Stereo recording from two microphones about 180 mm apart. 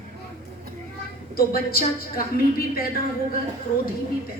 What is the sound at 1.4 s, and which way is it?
Speech, 55° left (ahead or behind).